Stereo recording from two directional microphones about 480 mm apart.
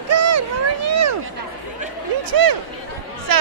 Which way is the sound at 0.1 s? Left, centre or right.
Right.